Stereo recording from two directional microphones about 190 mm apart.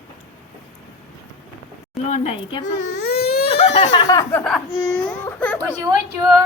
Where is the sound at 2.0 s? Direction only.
35° left (ahead or behind).